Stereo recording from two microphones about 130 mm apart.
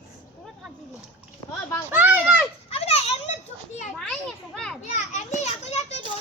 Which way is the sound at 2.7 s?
50° left (ahead or behind).